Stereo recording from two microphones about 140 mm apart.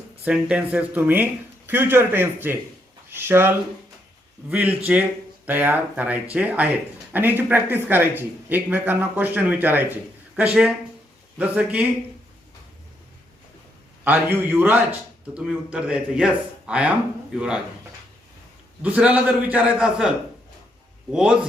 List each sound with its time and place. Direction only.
0.3 s speech: 10° right (ahead or behind)
14.0 s speech: 15° right (ahead or behind)
18.8 s speech: 10° right (ahead or behind)